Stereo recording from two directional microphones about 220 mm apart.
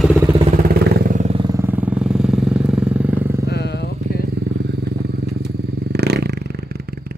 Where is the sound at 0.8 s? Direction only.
40° right (ahead or behind).